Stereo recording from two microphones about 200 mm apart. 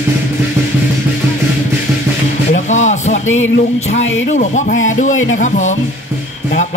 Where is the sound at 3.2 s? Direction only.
75° left (ahead or behind).